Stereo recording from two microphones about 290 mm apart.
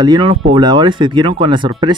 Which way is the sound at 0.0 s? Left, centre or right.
Centre.